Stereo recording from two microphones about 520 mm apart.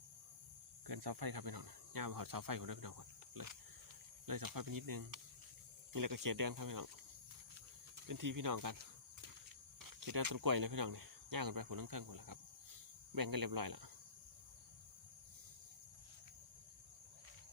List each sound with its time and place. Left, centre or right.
0.9 s speech: right
7.9 s speech: right
9.8 s speech: right